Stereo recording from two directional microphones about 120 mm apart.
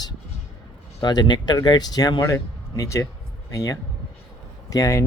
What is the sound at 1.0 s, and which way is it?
Speech, 40° left (ahead or behind).